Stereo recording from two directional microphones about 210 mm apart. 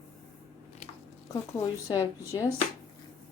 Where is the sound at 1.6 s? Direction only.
20° left (ahead or behind).